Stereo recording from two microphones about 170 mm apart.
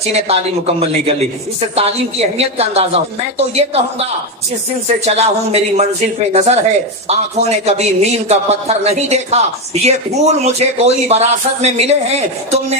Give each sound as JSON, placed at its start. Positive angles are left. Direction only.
{"t": 0.1, "sound": "speech", "side_deg": -35}
{"t": 5.0, "sound": "speech", "side_deg": -40}